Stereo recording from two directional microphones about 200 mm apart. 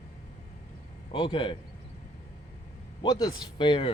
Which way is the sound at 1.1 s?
25° left (ahead or behind).